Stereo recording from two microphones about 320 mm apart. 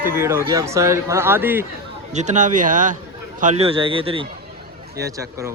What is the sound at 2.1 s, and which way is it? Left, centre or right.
Speech, right.